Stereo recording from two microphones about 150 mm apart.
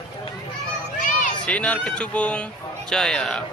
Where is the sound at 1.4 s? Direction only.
10° left (ahead or behind).